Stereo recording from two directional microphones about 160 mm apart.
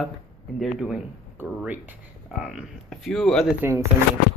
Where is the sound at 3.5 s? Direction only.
15° right (ahead or behind).